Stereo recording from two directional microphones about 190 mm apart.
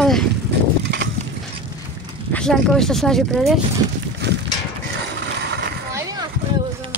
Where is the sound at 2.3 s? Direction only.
5° left (ahead or behind).